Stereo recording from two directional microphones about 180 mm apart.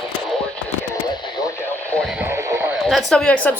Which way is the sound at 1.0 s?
25° left (ahead or behind).